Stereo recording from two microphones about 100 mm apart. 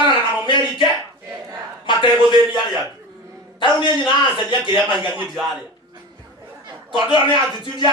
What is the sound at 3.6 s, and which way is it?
Speech, 50° left (ahead or behind).